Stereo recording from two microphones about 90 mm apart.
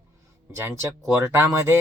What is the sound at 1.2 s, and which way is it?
Speech, 30° right (ahead or behind).